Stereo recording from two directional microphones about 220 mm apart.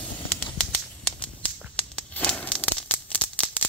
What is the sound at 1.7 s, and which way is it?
Tearing, 5° left (ahead or behind).